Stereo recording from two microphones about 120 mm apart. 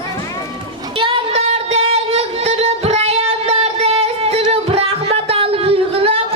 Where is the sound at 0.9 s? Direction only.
45° right (ahead or behind).